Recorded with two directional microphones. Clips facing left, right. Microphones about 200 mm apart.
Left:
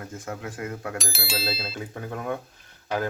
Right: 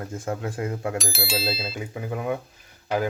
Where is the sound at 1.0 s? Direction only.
Centre (ahead or behind).